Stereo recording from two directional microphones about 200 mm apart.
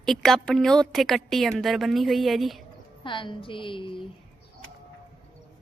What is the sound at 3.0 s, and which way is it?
A woman's voice, 25° left (ahead or behind).